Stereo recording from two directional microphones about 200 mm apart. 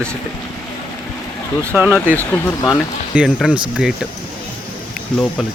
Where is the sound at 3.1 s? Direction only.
5° right (ahead or behind).